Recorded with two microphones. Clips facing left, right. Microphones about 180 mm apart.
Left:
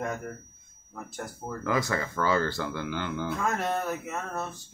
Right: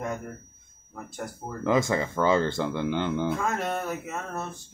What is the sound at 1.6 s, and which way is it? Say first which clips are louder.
Speech: right 5 dB; 20° right (ahead or behind).